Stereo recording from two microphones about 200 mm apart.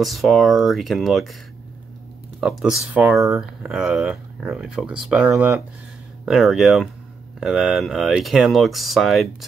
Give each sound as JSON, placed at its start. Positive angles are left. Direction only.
{"t": 0.0, "sound": "speech", "side_deg": 0}
{"t": 2.4, "sound": "speech", "side_deg": 0}